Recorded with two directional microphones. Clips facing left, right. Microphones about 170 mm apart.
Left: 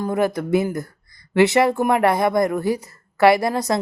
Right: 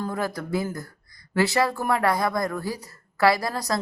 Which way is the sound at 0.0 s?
20° left (ahead or behind).